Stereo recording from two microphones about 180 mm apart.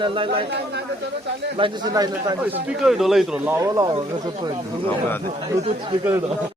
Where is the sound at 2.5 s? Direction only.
5° right (ahead or behind); by 4.0 s 20° right (ahead or behind).